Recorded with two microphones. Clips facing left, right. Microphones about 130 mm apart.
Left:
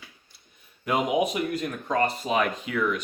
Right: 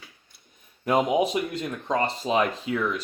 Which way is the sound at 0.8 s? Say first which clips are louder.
Right 2 dB; 35° right (ahead or behind).